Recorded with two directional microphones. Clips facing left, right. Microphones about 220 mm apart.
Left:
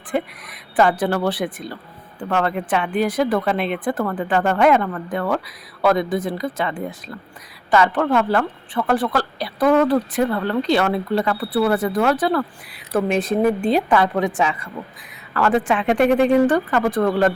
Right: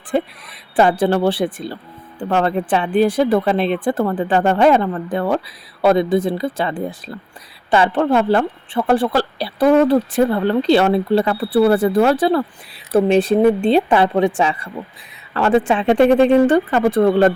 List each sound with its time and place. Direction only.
0.1 s a woman's voice: 30° right (ahead or behind)